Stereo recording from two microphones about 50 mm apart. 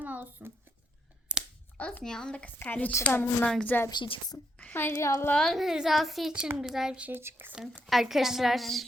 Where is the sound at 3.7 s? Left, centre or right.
Left.